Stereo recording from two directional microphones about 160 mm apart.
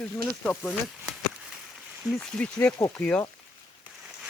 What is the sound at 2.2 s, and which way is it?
Speech, 5° left (ahead or behind).